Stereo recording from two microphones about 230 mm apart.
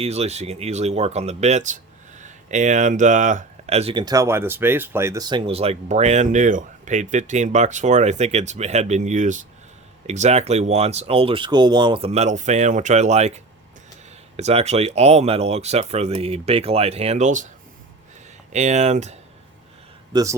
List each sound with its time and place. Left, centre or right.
0.0 s speech: right
18.5 s speech: right
20.1 s speech: centre